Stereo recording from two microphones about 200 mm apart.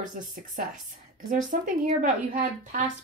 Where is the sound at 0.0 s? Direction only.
40° right (ahead or behind).